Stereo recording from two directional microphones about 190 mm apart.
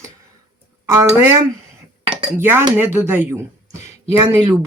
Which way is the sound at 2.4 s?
10° right (ahead or behind).